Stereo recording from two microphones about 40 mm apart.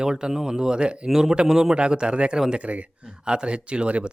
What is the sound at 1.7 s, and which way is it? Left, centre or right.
Speech, right.